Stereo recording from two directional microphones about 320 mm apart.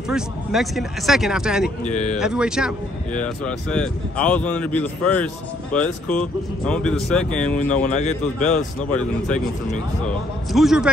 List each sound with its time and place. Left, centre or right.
0.1 s speech: centre
1.9 s a man's voice: left
2.1 s speech: centre
7.8 s a man's voice: left
10.0 s speech: centre